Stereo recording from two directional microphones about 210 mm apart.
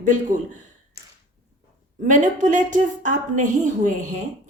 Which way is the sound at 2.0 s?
35° right (ahead or behind).